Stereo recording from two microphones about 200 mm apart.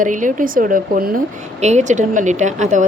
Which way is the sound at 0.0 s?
40° right (ahead or behind).